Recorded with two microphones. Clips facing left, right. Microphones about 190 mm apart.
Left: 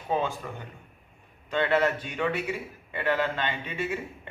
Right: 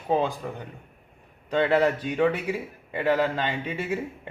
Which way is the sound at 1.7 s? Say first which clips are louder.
Right 2 dB; 35° right (ahead or behind).